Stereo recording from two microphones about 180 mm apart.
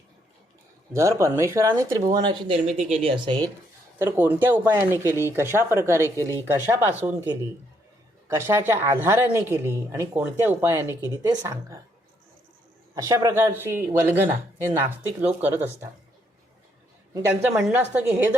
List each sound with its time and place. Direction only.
0.9 s speech: 15° right (ahead or behind)
3.9 s speech: 10° right (ahead or behind)
13.0 s speech: 15° right (ahead or behind)
17.2 s speech: 15° right (ahead or behind)